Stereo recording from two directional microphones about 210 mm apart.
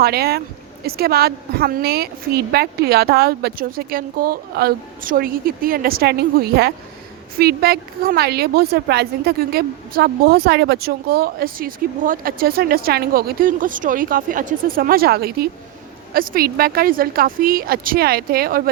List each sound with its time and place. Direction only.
0.0 s a woman's voice: 50° right (ahead or behind)